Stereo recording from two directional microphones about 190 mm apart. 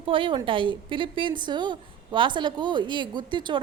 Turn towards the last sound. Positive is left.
turn(degrees=-25)  # may be behind; listen again after turning